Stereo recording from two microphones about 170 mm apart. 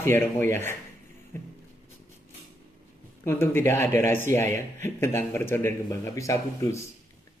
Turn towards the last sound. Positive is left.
turn(degrees=15)  # may be behind; listen again after turning